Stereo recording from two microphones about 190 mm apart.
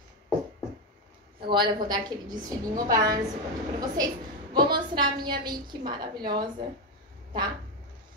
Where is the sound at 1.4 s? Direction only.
25° right (ahead or behind).